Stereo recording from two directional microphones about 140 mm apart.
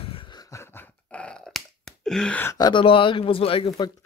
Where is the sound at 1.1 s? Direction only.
5° left (ahead or behind).